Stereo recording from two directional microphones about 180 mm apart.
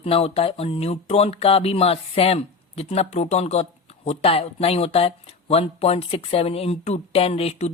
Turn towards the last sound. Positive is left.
turn(degrees=35)  # may be behind; listen again after turning